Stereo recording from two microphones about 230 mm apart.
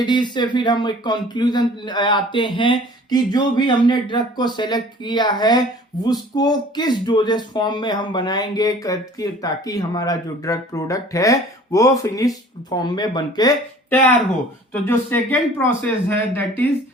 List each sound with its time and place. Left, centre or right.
0.0 s speech: centre
14.7 s speech: centre